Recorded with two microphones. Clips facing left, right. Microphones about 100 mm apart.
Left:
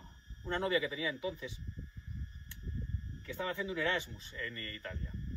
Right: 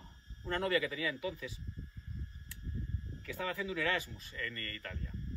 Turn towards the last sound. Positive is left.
turn(degrees=25)  # may be behind; listen again after turning